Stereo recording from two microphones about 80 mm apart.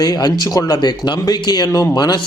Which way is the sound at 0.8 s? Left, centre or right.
Left.